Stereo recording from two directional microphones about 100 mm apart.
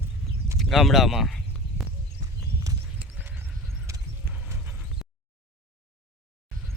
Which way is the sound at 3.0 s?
15° right (ahead or behind).